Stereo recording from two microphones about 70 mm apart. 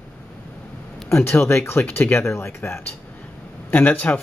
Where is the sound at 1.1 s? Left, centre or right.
Left.